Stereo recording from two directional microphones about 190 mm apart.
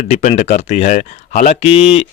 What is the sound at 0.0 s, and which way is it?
Speech, 35° left (ahead or behind).